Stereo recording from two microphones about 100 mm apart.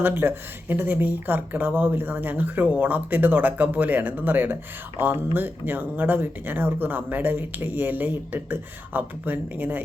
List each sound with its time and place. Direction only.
0.0 s speech: 20° right (ahead or behind)